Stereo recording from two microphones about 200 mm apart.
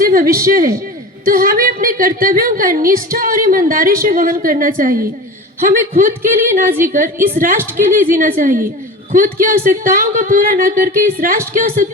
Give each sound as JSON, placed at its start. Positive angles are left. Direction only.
{"t": 0.0, "sound": "a woman's voice", "side_deg": -45}